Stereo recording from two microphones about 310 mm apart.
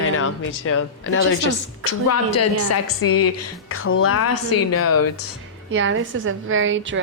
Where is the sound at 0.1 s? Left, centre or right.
Left.